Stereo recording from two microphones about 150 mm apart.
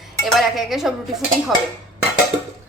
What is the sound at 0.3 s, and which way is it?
Speech, centre (ahead or behind).